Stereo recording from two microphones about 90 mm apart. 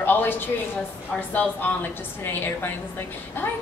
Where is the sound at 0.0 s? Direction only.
20° left (ahead or behind).